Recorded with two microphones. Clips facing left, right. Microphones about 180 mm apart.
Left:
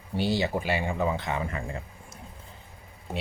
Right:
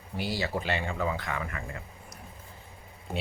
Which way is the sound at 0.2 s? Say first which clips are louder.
Left 5 dB; 25° left (ahead or behind).